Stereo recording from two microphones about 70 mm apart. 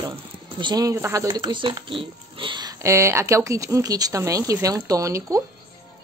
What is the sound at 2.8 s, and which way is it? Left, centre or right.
Speech, right.